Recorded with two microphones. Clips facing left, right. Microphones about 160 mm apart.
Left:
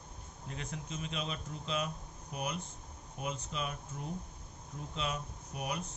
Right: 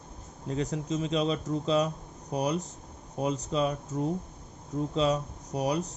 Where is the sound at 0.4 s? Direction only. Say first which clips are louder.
Right 13 dB; 35° right (ahead or behind).